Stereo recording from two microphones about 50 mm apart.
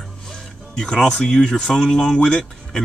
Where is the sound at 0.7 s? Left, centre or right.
Centre.